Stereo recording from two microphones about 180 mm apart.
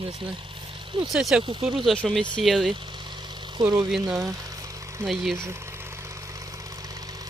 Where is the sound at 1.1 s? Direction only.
Centre (ahead or behind).